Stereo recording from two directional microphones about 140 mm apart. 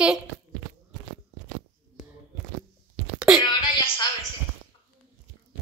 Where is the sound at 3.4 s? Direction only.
30° left (ahead or behind).